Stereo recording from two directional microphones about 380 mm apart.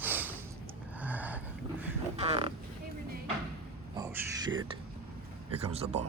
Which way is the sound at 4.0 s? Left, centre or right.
Centre.